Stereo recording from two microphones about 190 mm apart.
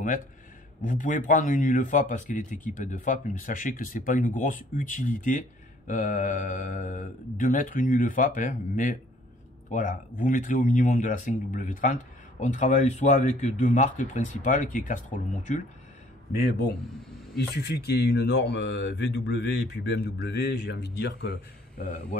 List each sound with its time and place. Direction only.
0.8 s speech: 40° left (ahead or behind)
16.3 s speech: 55° left (ahead or behind)